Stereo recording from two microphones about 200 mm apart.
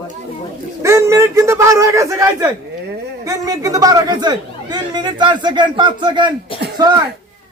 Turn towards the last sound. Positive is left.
turn(degrees=-20)  # may be behind; listen again after turning